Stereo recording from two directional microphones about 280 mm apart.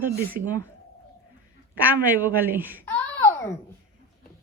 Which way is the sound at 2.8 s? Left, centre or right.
Centre.